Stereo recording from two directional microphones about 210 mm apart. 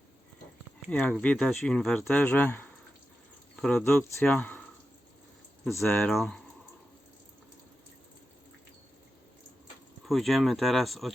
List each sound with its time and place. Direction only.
0.9 s speech: 5° left (ahead or behind)
5.8 s speech: centre (ahead or behind)
10.1 s speech: centre (ahead or behind)